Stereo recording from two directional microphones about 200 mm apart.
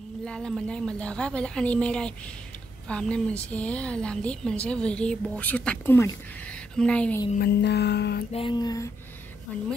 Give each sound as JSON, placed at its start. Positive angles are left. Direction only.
{"t": 0.2, "sound": "a woman's voice", "side_deg": 5}
{"t": 7.3, "sound": "music", "side_deg": 55}
{"t": 8.3, "sound": "mantra", "side_deg": 25}